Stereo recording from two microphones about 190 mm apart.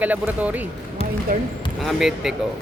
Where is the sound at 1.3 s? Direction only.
45° right (ahead or behind).